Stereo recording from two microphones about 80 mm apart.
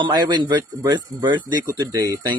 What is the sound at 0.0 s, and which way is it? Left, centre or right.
Speech, right.